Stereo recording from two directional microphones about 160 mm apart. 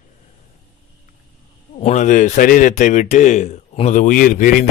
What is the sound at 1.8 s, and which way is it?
A man's voice, 45° left (ahead or behind).